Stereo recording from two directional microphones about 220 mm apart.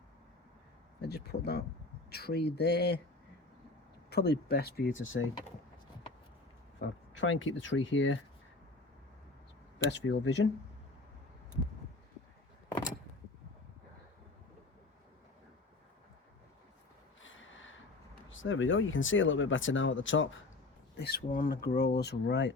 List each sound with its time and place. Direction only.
1.0 s speech: 45° left (ahead or behind)
4.1 s speech: 50° left (ahead or behind)
7.1 s speech: 60° left (ahead or behind)
9.9 s speech: 55° left (ahead or behind)
12.6 s vehicle: 10° left (ahead or behind)
17.2 s a sound: 60° left (ahead or behind)
18.3 s speech: 60° left (ahead or behind)
21.0 s speech: 45° left (ahead or behind)